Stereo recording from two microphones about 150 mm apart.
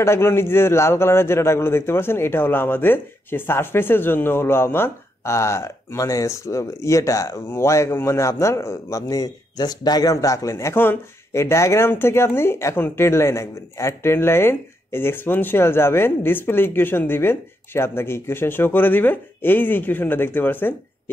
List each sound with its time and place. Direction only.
0.0 s a man's voice: 15° left (ahead or behind)